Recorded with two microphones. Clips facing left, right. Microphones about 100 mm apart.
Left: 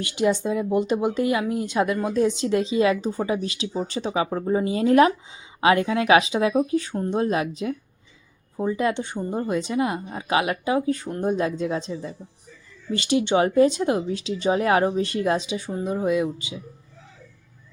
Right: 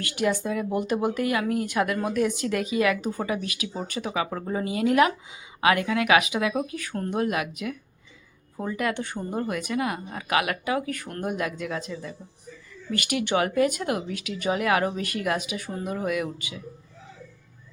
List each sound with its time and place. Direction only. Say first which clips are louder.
0.0 s speech: left 4 dB; 20° left (ahead or behind)